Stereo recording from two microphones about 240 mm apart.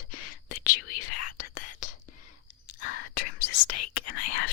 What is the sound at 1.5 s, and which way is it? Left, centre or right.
Whispering, left.